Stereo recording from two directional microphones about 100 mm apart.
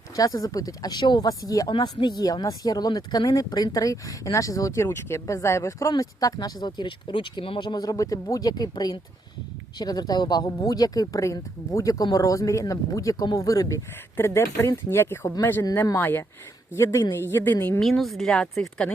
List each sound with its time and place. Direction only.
0.2 s a woman's voice: 35° left (ahead or behind)
17.7 s speech: 5° left (ahead or behind)